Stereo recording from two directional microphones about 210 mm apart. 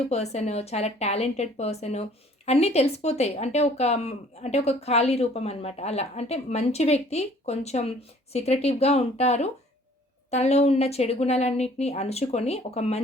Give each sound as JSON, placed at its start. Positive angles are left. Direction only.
{"t": 0.1, "sound": "speech", "side_deg": 30}